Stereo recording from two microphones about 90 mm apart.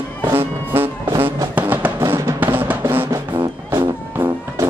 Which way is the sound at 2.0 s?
30° right (ahead or behind).